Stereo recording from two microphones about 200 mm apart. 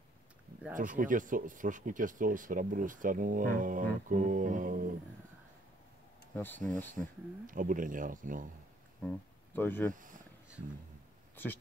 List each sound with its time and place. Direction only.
0.7 s speech: 40° right (ahead or behind)
6.3 s speech: 10° left (ahead or behind)
7.4 s speech: 40° right (ahead or behind)
9.0 s speech: 10° left (ahead or behind)
11.4 s speech: 10° left (ahead or behind)